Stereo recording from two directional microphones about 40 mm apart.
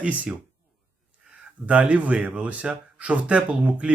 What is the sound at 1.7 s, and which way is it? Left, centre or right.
Speech, right.